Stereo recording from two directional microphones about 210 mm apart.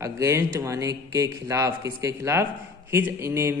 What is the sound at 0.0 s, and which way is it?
A man's voice, 15° right (ahead or behind).